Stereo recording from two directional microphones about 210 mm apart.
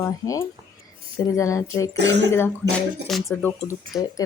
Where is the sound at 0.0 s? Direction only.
15° left (ahead or behind).